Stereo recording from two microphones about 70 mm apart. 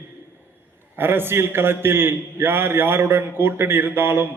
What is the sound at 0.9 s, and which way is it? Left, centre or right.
A man's voice, right.